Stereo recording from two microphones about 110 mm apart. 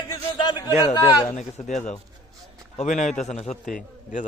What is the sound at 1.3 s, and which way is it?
A man's voice, 90° left.